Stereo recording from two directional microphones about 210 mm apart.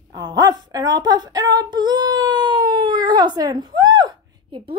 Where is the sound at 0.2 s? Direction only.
20° right (ahead or behind).